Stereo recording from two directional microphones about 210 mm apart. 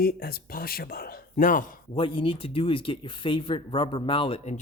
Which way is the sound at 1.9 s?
25° left (ahead or behind).